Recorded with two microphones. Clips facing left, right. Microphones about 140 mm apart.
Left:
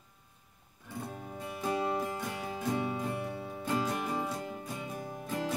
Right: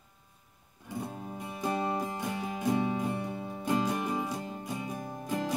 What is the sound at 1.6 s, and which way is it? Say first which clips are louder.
Music: right 1 dB; 20° right (ahead or behind).